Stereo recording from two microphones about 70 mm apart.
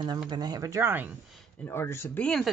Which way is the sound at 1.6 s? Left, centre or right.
Left.